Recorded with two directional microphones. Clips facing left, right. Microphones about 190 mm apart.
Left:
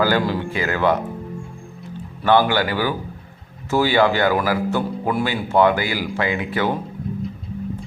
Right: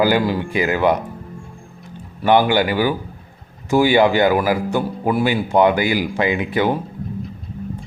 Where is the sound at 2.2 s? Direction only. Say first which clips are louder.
Right 2 dB; 15° right (ahead or behind).